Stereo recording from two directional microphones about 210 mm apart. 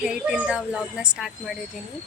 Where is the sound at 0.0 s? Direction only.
5° right (ahead or behind).